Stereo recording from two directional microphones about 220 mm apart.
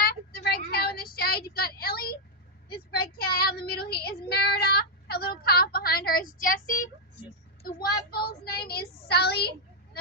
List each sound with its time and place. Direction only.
0.0 s child singing: 45° left (ahead or behind)
2.6 s speech: 45° left (ahead or behind)
8.1 s speech: 45° left (ahead or behind)